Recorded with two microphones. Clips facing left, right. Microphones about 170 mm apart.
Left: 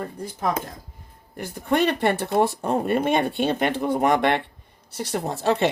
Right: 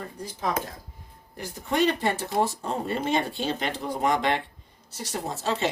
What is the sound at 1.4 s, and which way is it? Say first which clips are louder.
Speech: left 3 dB; 60° left (ahead or behind).